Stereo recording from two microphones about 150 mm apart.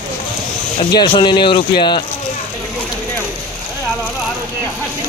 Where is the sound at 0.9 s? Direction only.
30° left (ahead or behind).